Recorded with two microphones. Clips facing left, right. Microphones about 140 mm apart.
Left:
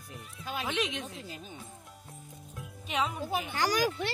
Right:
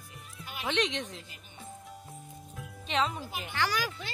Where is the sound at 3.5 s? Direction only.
40° left (ahead or behind).